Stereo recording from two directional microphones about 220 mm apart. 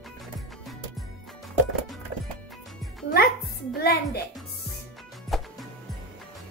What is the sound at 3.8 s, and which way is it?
Speech, 45° left (ahead or behind).